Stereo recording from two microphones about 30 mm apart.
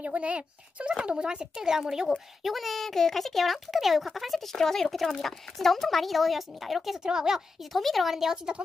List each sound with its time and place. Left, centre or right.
0.0 s a child's voice: right
1.1 s a woman's voice: right
2.0 s a child's voice: centre
4.5 s a child's voice: centre
7.0 s a woman's voice: centre
7.7 s a child's voice: centre
8.1 s speech: centre